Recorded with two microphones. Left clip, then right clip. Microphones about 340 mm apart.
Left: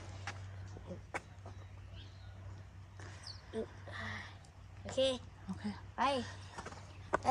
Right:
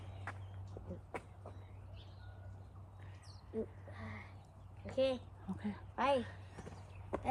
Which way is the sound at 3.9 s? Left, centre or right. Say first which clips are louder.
Left 7 dB; centre.